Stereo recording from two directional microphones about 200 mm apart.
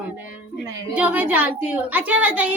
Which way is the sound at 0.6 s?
10° right (ahead or behind).